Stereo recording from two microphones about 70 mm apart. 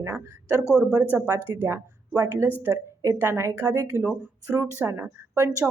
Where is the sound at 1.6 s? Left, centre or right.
Right.